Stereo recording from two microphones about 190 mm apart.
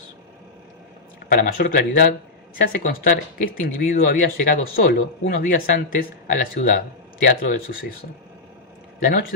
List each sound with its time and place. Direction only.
1.3 s speech: 50° left (ahead or behind)
9.0 s a man's voice: 45° left (ahead or behind)